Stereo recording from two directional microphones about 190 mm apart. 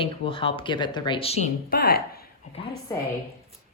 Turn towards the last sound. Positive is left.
turn(degrees=15)  # may be behind; listen again after turning